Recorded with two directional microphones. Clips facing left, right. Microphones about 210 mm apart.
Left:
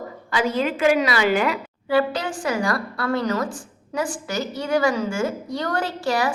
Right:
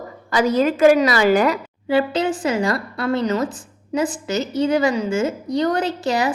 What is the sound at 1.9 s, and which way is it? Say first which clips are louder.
A woman's voice: right 3 dB; 25° right (ahead or behind).